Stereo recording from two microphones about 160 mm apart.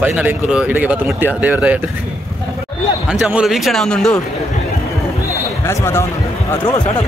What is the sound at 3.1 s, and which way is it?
Speech, 5° right (ahead or behind).